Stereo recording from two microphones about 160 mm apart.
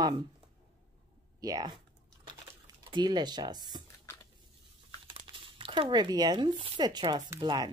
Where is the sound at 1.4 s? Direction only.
25° right (ahead or behind).